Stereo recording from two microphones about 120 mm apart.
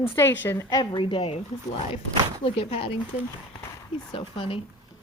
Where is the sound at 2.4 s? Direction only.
50° left (ahead or behind).